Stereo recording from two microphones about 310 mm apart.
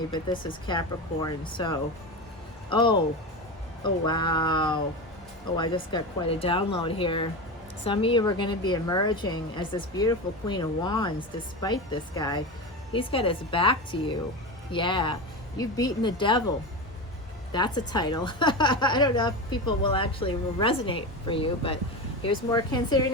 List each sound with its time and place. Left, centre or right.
0.1 s a woman's voice: centre
17.5 s a woman's voice: centre